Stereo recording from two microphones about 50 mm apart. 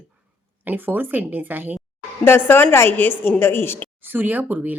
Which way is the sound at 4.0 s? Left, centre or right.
Right.